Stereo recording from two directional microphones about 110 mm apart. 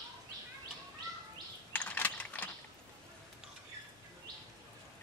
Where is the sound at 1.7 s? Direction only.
15° left (ahead or behind).